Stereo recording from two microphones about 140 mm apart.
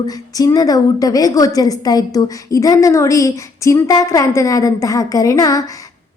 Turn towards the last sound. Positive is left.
turn(degrees=25)  # may be behind; listen again after turning